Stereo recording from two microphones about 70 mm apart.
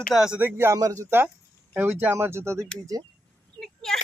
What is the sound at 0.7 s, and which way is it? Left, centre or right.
Speech, right.